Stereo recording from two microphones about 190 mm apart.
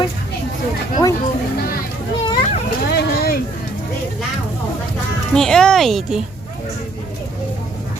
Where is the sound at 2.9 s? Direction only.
60° left (ahead or behind).